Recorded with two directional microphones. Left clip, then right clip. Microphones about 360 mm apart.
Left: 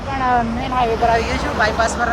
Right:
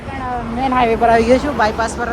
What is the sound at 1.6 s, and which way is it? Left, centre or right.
Speech, centre.